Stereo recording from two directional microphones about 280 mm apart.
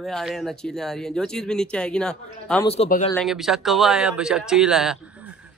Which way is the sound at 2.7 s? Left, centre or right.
Left.